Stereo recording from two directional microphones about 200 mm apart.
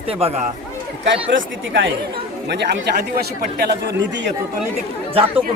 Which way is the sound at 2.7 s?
45° right (ahead or behind).